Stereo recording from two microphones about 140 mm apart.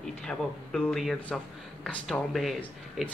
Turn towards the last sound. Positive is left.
turn(degrees=0)  # may be behind; listen again after turning